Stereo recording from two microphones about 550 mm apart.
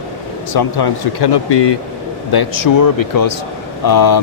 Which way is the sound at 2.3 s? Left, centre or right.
Left.